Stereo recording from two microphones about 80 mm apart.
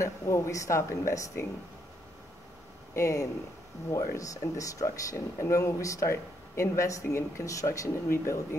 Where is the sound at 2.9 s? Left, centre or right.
Left.